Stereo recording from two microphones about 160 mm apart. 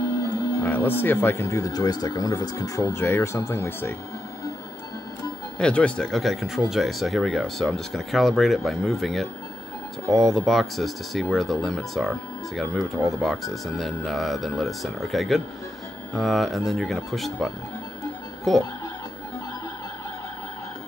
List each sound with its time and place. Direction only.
0.2 s speech: 20° left (ahead or behind)
5.6 s speech: 5° left (ahead or behind)